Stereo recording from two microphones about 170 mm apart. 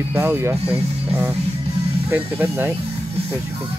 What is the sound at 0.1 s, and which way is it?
Speech, 10° right (ahead or behind).